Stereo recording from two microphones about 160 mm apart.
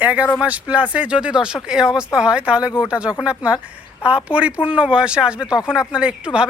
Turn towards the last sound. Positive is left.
turn(degrees=-5)  # may be behind; listen again after turning